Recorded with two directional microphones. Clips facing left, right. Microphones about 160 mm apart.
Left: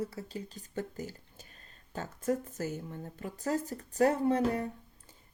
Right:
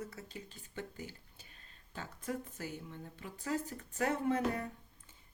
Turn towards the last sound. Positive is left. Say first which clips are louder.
# left 5 dB
turn(degrees=35)  # may be behind; listen again after turning